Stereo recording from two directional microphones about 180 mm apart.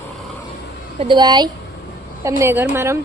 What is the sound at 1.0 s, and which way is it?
Speech, 25° right (ahead or behind).